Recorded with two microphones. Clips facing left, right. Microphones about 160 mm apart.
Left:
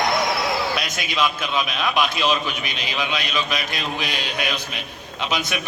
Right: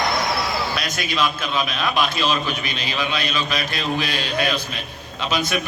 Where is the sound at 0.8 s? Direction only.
20° left (ahead or behind).